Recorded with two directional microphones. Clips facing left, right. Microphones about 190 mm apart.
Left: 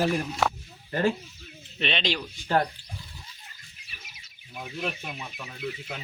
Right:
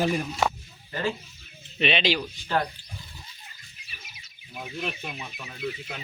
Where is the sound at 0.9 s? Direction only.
50° left (ahead or behind).